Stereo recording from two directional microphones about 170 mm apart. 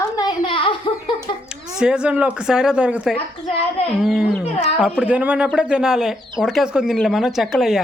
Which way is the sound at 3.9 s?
Centre (ahead or behind).